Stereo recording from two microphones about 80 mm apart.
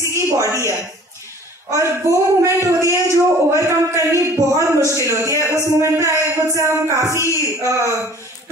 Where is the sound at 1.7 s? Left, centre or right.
Right.